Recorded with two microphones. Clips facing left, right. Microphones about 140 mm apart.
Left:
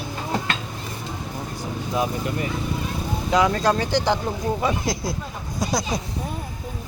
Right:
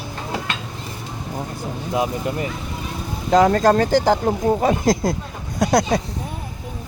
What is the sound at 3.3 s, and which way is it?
Speech, 45° right (ahead or behind).